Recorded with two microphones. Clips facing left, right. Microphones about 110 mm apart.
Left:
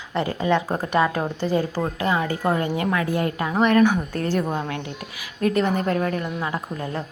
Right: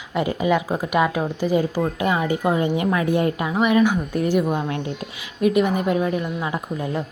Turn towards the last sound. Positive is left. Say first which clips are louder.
# right 3 dB
turn(degrees=-15)  # may be behind; listen again after turning